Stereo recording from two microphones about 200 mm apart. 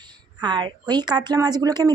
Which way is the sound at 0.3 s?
20° right (ahead or behind).